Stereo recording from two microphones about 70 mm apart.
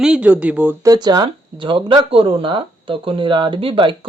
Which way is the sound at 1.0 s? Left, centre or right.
Right.